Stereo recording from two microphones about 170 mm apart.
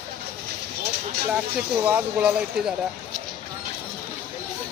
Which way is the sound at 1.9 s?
10° right (ahead or behind).